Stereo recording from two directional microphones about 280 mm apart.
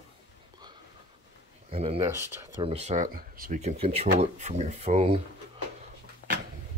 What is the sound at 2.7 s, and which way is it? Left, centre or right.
Speech, right.